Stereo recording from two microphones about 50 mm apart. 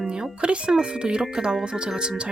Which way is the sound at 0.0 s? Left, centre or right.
Centre.